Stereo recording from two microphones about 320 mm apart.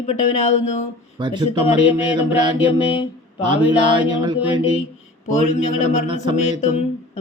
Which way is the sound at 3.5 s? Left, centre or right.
Centre.